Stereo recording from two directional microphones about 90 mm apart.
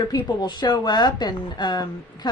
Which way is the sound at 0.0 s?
55° left (ahead or behind).